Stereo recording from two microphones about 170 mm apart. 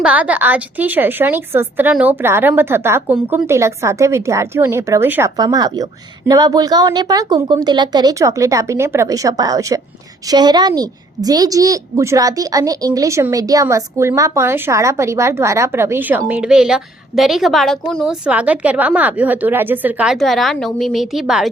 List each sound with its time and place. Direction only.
0.0 s a woman's voice: 10° right (ahead or behind)